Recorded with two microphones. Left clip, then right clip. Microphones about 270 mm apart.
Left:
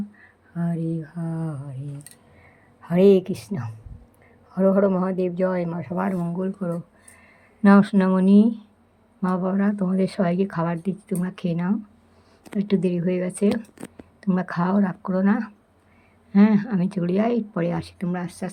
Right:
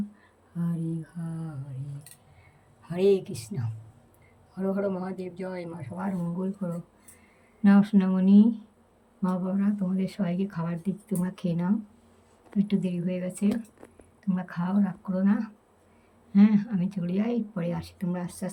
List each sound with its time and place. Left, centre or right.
0.5 s speech: centre
2.8 s speech: centre
7.6 s speech: centre